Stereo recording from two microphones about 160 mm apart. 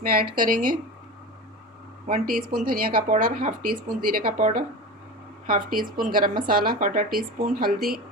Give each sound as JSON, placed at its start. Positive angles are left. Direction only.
{"t": 0.0, "sound": "speech", "side_deg": -65}
{"t": 2.2, "sound": "speech", "side_deg": -65}